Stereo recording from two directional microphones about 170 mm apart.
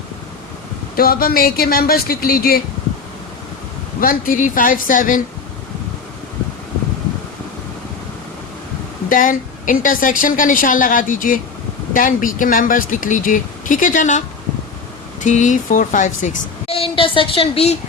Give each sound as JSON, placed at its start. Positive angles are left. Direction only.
{"t": 0.9, "sound": "speech", "side_deg": 60}
{"t": 4.0, "sound": "speech", "side_deg": 55}
{"t": 9.0, "sound": "a woman's voice", "side_deg": 50}